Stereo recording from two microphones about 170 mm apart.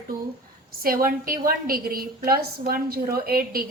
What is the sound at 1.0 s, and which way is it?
A woman's voice, 55° right (ahead or behind).